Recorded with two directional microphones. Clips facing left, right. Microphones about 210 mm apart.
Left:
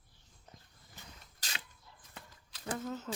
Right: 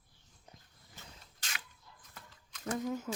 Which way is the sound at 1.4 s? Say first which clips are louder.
Left 1 dB; 30° left (ahead or behind).